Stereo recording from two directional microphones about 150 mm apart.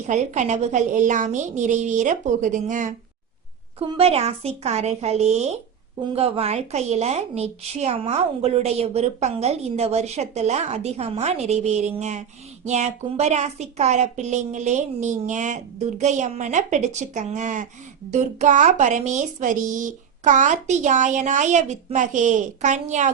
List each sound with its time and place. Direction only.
0.1 s a woman's voice: 50° right (ahead or behind)
3.8 s a woman's voice: 40° right (ahead or behind)